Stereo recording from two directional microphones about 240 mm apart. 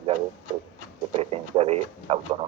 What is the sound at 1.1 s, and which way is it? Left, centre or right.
Speech, right.